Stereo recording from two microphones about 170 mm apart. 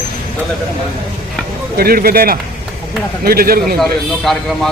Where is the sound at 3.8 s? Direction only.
Centre (ahead or behind).